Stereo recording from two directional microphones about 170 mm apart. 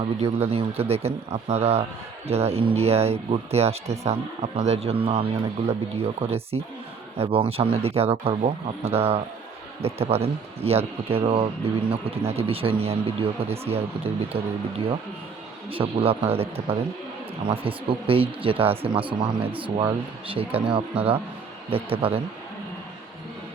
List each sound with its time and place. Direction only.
0.0 s speech: 35° right (ahead or behind)
15.7 s speech: 35° right (ahead or behind)